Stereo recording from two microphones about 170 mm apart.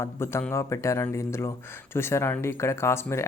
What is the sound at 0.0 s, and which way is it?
Speech, 15° left (ahead or behind).